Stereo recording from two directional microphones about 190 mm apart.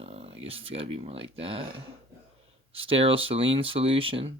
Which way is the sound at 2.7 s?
30° right (ahead or behind).